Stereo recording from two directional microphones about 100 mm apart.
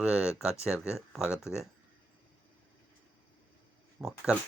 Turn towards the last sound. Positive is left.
turn(degrees=-5)  # may be behind; listen again after turning